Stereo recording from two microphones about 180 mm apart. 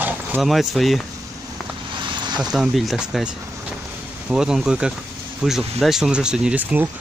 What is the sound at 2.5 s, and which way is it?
Speech, centre (ahead or behind).